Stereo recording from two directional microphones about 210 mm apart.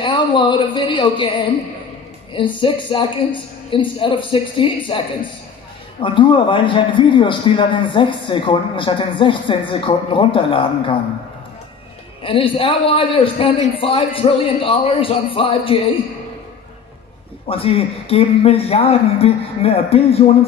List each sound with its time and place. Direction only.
0.0 s a man's voice: 20° left (ahead or behind)
2.3 s a man's voice: 25° left (ahead or behind)
12.2 s a man's voice: 25° left (ahead or behind)
17.5 s a man's voice: 25° left (ahead or behind)